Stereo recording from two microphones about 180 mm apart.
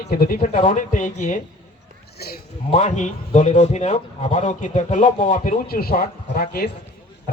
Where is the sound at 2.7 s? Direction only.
40° left (ahead or behind).